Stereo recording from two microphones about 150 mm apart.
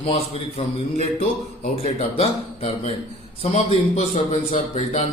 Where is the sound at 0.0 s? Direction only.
40° left (ahead or behind).